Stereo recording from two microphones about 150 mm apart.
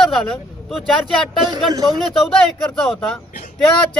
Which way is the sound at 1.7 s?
25° right (ahead or behind).